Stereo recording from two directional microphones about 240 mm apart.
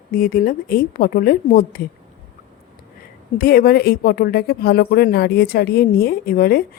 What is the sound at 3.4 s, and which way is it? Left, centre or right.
Speech, left.